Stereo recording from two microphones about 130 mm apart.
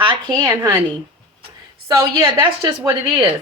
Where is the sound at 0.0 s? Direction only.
40° right (ahead or behind).